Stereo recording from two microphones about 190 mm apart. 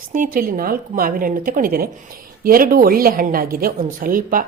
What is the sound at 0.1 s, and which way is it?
Speech, 45° right (ahead or behind).